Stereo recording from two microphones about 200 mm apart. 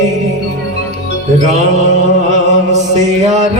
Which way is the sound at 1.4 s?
35° right (ahead or behind).